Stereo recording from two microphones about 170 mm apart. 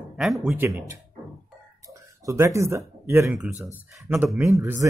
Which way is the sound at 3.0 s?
15° right (ahead or behind).